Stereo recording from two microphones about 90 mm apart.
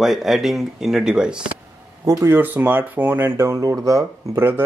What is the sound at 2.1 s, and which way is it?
Speech, 30° right (ahead or behind).